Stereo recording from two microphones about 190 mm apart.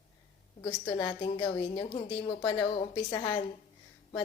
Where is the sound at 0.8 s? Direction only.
20° left (ahead or behind).